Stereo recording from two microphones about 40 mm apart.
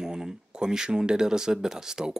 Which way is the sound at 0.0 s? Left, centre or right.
Centre.